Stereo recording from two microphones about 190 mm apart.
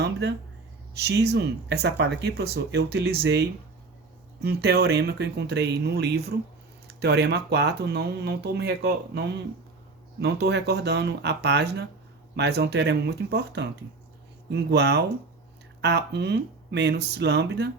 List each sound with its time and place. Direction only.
0.0 s speech: 60° right (ahead or behind)